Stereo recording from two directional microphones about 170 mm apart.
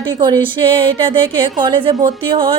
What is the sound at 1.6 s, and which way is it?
Speech, 30° right (ahead or behind).